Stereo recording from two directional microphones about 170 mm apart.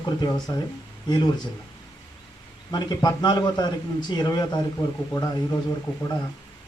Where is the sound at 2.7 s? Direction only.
25° left (ahead or behind).